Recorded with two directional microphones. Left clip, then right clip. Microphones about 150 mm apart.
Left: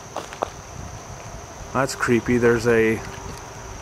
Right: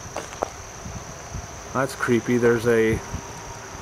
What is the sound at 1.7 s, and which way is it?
Speech, 10° left (ahead or behind).